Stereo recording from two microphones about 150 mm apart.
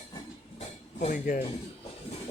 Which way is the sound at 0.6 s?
50° left (ahead or behind).